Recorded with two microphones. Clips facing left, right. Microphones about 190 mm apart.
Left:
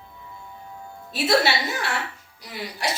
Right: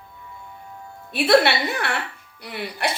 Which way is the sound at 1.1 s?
60° right (ahead or behind).